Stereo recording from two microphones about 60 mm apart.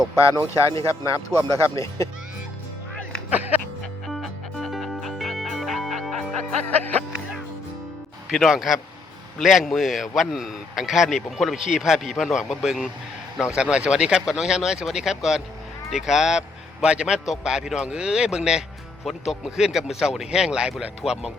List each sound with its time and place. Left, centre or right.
0.3 s speech: left
1.5 s speech: left
3.2 s music: right
4.0 s music: centre
6.7 s music: left
8.3 s a man's voice: centre
13.6 s speech: centre